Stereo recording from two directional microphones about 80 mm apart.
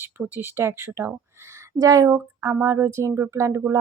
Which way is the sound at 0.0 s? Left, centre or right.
Right.